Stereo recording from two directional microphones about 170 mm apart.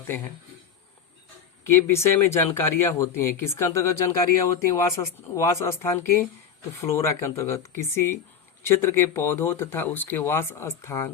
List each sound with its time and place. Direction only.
1.7 s speech: 15° left (ahead or behind)